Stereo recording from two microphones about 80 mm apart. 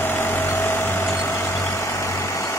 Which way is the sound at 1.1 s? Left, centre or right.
Left.